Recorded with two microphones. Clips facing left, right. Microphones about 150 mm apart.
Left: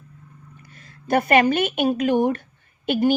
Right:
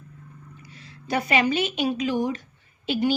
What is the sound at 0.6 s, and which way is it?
A woman's voice, 50° left (ahead or behind).